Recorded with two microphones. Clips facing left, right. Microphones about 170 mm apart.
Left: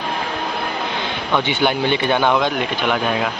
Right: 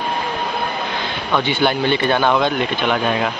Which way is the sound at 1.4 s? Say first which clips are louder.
Right 2 dB; 15° left (ahead or behind).